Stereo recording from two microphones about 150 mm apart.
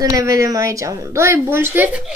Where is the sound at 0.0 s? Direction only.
20° right (ahead or behind).